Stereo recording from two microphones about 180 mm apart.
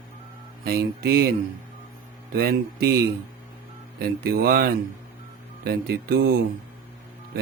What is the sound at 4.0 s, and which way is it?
Speech, 60° right (ahead or behind).